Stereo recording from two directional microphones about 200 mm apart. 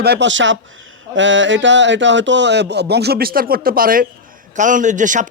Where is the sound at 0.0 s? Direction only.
55° right (ahead or behind).